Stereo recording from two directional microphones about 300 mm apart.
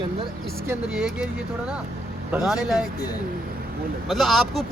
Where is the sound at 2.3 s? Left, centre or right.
Centre.